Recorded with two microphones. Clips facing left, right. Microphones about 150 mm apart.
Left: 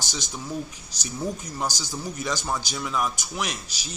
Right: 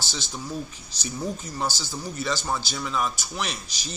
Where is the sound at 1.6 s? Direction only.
15° left (ahead or behind).